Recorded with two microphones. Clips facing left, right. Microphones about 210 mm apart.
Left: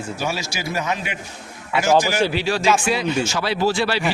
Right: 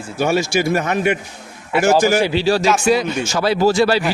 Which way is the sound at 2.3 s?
30° right (ahead or behind).